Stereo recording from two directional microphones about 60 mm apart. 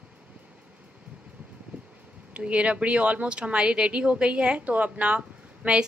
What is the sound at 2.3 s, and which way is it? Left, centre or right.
A woman's voice, centre.